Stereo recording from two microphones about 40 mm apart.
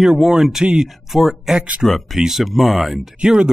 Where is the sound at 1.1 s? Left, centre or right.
Centre.